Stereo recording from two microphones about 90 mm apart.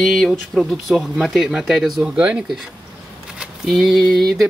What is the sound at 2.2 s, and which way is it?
Speech, 15° right (ahead or behind).